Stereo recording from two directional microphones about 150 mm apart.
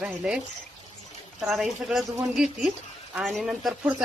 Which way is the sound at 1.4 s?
Centre (ahead or behind).